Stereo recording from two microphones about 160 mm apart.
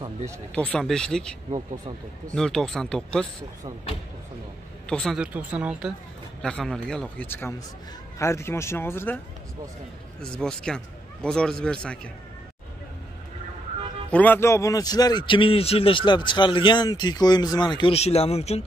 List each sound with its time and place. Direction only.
0.6 s speech: 5° left (ahead or behind)
1.5 s speech: 30° right (ahead or behind)
2.3 s speech: 5° left (ahead or behind)
4.8 s a man's voice: 5° left (ahead or behind)
10.2 s speech: 5° left (ahead or behind)
14.1 s a man's voice: 10° left (ahead or behind); by 18.6 s 40° left (ahead or behind)